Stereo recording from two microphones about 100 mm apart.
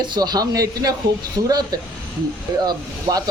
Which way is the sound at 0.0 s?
45° right (ahead or behind).